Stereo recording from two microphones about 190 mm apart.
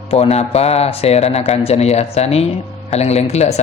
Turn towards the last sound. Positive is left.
turn(degrees=35)  # may be behind; listen again after turning